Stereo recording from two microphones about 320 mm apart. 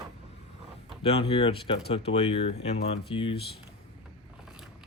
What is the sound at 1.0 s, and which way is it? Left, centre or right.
Speech, centre.